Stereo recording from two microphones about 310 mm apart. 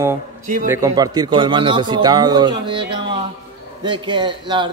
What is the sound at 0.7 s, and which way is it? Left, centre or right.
A man's voice, centre.